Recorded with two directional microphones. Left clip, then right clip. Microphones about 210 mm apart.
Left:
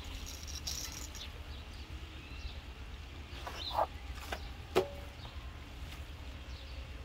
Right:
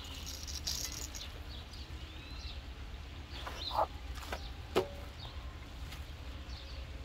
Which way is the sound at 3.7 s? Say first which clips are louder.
Even; 20° left (ahead or behind).